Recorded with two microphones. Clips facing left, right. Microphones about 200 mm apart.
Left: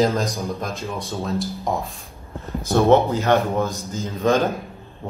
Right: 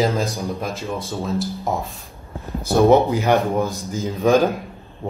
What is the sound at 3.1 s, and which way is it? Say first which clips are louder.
Speech: right 1 dB; 15° right (ahead or behind).